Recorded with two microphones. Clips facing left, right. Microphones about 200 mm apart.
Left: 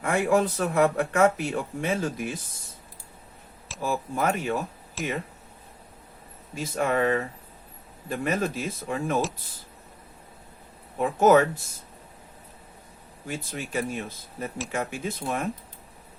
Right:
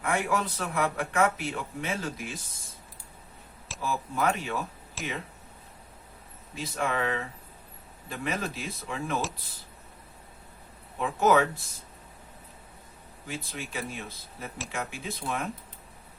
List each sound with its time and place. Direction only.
0.0 s speech: 50° left (ahead or behind)
3.8 s speech: 45° left (ahead or behind)
5.0 s speech: centre (ahead or behind)
6.5 s speech: 45° left (ahead or behind)
11.0 s speech: 45° left (ahead or behind)
13.2 s speech: 50° left (ahead or behind)